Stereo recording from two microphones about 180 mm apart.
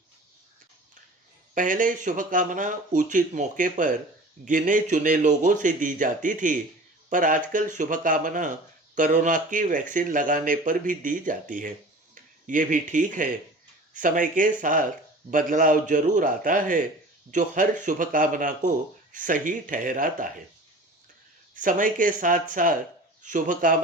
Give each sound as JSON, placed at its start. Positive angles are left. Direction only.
{"t": 1.5, "sound": "speech", "side_deg": -45}
{"t": 21.5, "sound": "speech", "side_deg": -45}